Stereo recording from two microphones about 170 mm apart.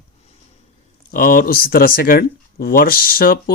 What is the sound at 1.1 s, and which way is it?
Speech, 55° left (ahead or behind).